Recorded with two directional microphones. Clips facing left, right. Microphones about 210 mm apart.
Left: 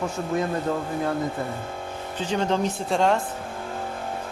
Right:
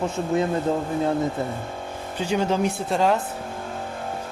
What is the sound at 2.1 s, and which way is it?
Speech, 10° right (ahead or behind).